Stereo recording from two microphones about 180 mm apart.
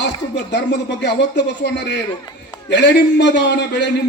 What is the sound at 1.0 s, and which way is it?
A man's voice, 75° left (ahead or behind).